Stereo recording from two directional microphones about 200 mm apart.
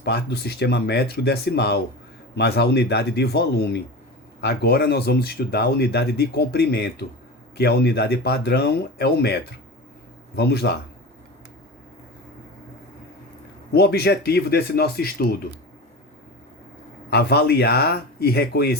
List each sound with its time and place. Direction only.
0.0 s speech: 55° left (ahead or behind)
13.7 s speech: 55° left (ahead or behind)
17.1 s speech: 55° left (ahead or behind)